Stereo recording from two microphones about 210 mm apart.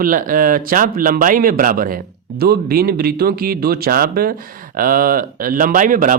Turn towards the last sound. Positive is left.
turn(degrees=-40)  # may be behind; listen again after turning